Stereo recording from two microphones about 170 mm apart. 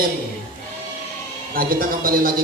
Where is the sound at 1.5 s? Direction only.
60° right (ahead or behind).